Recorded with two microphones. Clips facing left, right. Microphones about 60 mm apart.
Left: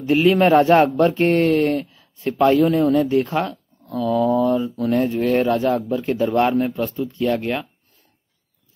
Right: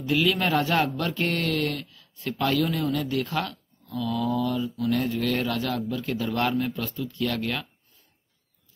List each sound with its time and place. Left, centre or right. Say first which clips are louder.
0.0 s a man's voice: left 9 dB; left